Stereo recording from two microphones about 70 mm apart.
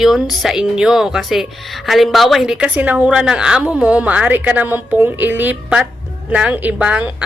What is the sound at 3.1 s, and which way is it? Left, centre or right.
A woman's voice, centre.